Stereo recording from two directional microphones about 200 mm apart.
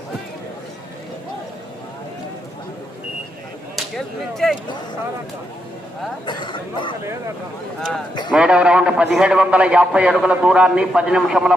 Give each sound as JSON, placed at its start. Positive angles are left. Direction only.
{"t": 3.8, "sound": "speech", "side_deg": 0}
{"t": 6.2, "sound": "speech", "side_deg": 20}
{"t": 8.3, "sound": "a man's voice", "side_deg": -5}